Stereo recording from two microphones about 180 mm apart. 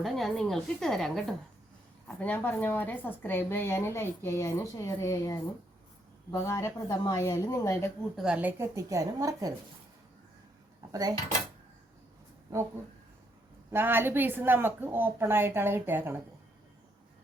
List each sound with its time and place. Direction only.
0.0 s a woman's voice: centre (ahead or behind); by 7.9 s 15° left (ahead or behind)
8.1 s a woman's voice: 5° right (ahead or behind)
12.5 s a woman's voice: 15° right (ahead or behind)